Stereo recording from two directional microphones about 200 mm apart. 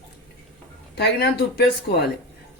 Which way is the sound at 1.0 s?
50° left (ahead or behind).